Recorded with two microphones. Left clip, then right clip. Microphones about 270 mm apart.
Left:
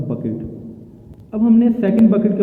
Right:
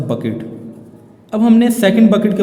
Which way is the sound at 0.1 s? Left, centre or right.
Right.